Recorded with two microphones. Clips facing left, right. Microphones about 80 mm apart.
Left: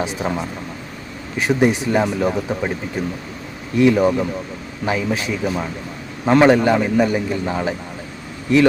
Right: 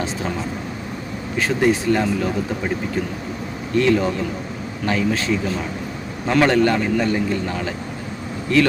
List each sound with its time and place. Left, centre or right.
0.0 s speech: centre
3.8 s a man's voice: centre